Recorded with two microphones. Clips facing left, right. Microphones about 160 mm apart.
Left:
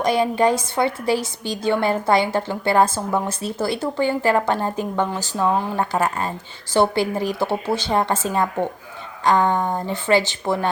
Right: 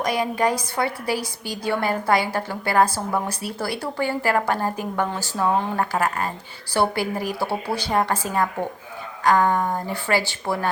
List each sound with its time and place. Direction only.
0.0 s a woman's voice: 25° left (ahead or behind)